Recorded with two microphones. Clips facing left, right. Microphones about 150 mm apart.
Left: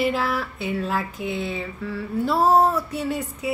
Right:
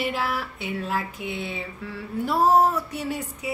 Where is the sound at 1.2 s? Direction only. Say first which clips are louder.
Left 4 dB; 40° left (ahead or behind).